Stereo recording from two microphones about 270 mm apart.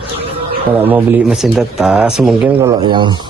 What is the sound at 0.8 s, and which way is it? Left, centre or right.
Speech, centre.